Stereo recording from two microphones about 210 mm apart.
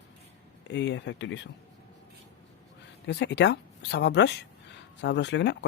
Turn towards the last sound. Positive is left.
turn(degrees=55)  # may be behind; listen again after turning